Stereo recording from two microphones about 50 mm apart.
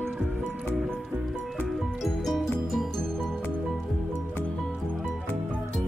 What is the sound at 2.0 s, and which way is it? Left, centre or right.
Music, centre.